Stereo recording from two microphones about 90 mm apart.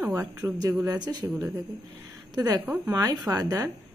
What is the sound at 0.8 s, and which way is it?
Speech, 45° right (ahead or behind).